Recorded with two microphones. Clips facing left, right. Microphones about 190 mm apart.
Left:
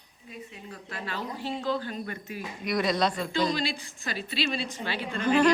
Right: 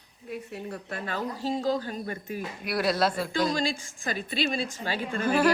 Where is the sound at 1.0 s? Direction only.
45° right (ahead or behind).